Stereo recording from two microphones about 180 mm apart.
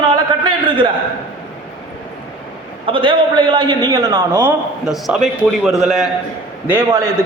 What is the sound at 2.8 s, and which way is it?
A man's voice, 30° right (ahead or behind).